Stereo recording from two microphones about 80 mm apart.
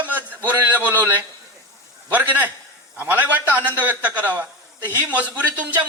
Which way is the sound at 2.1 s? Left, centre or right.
Right.